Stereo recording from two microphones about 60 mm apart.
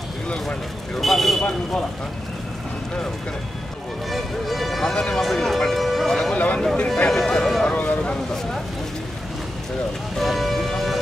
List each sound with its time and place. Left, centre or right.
0.3 s speech: centre
1.0 s speech: centre
4.1 s speech: centre
4.9 s speech: centre
5.2 s music: centre
6.3 s a sound: left
7.1 s a sound: centre
10.1 s music: centre